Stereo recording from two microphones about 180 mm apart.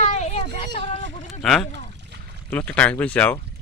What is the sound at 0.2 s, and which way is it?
Children playing, 40° left (ahead or behind).